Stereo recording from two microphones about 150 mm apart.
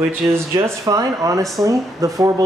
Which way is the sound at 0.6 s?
25° right (ahead or behind).